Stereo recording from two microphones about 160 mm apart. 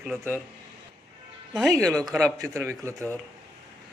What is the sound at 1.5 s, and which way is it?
Speech, centre (ahead or behind).